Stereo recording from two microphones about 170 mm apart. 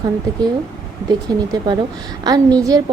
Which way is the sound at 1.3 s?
25° right (ahead or behind).